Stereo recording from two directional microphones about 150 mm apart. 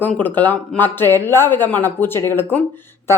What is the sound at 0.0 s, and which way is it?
A woman's voice, 10° left (ahead or behind).